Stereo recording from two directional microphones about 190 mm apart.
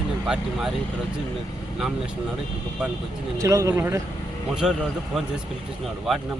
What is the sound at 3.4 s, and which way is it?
Speech, 15° right (ahead or behind).